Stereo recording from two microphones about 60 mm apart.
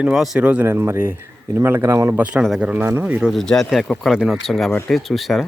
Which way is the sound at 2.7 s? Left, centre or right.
Right.